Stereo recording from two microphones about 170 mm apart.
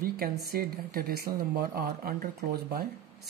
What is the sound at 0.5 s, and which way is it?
Speech, 60° right (ahead or behind).